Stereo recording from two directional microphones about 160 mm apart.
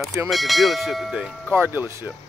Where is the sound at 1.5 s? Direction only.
15° right (ahead or behind).